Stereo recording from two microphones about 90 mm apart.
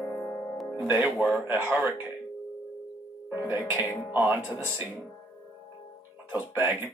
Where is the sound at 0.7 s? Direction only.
25° right (ahead or behind).